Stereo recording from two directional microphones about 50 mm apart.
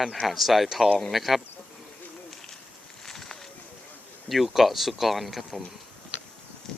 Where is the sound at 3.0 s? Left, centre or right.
Centre.